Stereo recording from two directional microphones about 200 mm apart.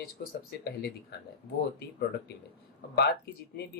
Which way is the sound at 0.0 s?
50° left (ahead or behind).